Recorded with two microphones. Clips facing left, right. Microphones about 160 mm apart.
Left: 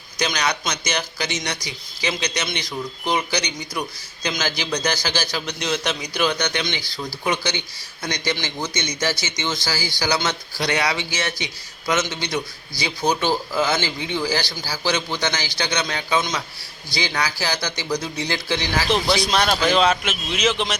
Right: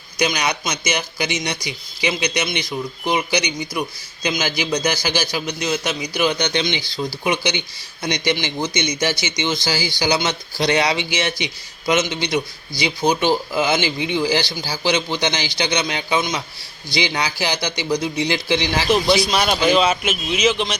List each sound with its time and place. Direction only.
0.2 s speech: 10° right (ahead or behind)
19.1 s a man's voice: 5° right (ahead or behind)